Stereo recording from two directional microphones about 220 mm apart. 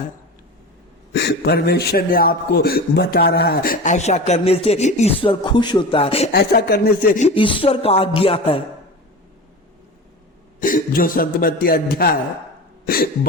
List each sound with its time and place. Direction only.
1.1 s a man's voice: 50° left (ahead or behind); by 6.3 s 25° left (ahead or behind)
6.3 s speech: 45° left (ahead or behind); by 8.6 s 25° left (ahead or behind)
10.6 s a man's voice: 40° left (ahead or behind)
12.8 s a sound: 40° left (ahead or behind)